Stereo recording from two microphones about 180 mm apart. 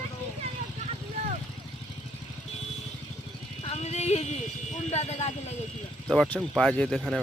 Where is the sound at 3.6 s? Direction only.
35° left (ahead or behind).